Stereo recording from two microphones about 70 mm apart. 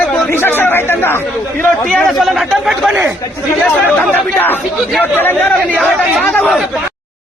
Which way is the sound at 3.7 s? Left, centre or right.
Left.